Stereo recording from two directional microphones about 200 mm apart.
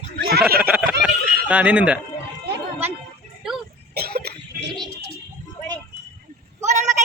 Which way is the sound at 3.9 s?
50° right (ahead or behind).